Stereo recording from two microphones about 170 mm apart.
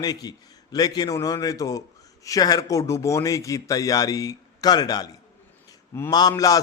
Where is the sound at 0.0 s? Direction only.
20° left (ahead or behind).